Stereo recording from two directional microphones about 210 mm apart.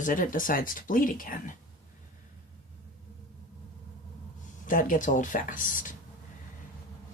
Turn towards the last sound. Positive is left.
turn(degrees=40)  # may be behind; listen again after turning